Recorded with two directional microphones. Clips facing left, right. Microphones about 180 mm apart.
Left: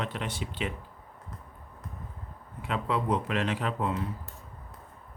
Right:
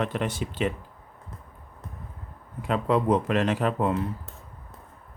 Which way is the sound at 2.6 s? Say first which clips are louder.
Right 6 dB; 45° right (ahead or behind).